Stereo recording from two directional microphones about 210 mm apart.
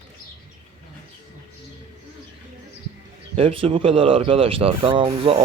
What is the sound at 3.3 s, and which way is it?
Speech, 25° right (ahead or behind).